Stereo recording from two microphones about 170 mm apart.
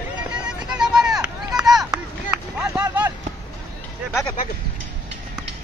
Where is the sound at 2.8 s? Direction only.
20° right (ahead or behind).